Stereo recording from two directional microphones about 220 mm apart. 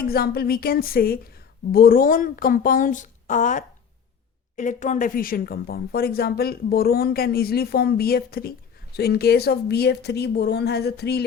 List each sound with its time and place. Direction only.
0.0 s speech: 45° left (ahead or behind)